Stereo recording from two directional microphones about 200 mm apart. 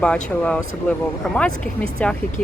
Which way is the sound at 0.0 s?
5° left (ahead or behind).